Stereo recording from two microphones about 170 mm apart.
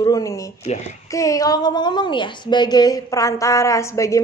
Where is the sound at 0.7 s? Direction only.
40° left (ahead or behind).